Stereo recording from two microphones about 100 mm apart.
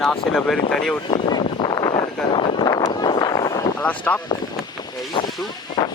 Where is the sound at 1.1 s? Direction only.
50° left (ahead or behind).